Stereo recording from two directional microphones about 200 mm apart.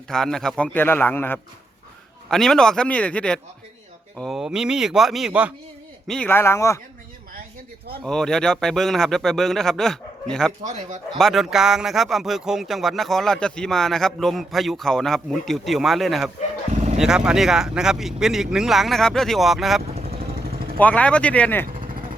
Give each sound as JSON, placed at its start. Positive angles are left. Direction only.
{"t": 0.1, "sound": "a man's voice", "side_deg": 5}
{"t": 6.1, "sound": "a man's voice", "side_deg": 5}
{"t": 8.0, "sound": "speech", "side_deg": 5}
{"t": 16.7, "sound": "a sound", "side_deg": -35}
{"t": 17.0, "sound": "speech", "side_deg": -5}
{"t": 19.9, "sound": "vehicle", "side_deg": -30}
{"t": 20.1, "sound": "vehicle", "side_deg": -50}
{"t": 20.7, "sound": "a man's voice", "side_deg": 5}
{"t": 21.7, "sound": "vehicle", "side_deg": -45}